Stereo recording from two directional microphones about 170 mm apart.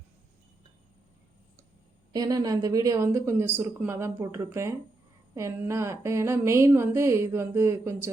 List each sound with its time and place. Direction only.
2.1 s speech: 20° right (ahead or behind)